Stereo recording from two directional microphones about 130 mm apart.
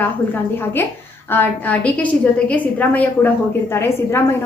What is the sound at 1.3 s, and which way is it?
A woman's voice, 15° left (ahead or behind).